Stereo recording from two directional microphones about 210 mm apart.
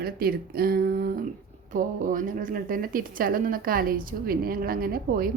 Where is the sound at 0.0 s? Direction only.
45° right (ahead or behind).